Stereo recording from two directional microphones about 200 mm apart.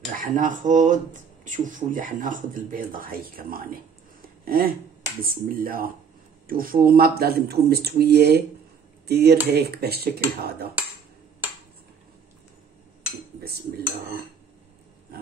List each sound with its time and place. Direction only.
0.1 s speech: 45° right (ahead or behind)